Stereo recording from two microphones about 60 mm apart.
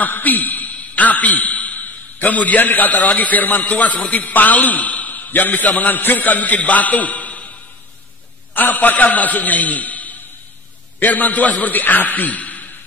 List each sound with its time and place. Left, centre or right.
0.0 s a man's voice: left
8.5 s a man's voice: left